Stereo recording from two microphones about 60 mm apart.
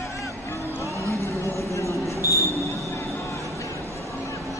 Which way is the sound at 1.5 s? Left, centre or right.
Left.